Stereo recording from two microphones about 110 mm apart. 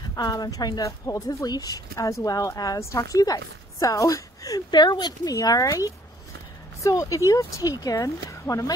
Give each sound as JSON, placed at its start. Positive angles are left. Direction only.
{"t": 0.1, "sound": "speech", "side_deg": 35}